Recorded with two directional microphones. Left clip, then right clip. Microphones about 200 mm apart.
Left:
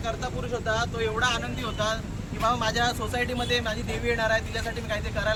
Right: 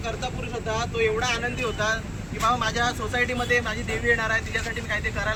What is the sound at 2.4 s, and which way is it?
Speech, 20° left (ahead or behind).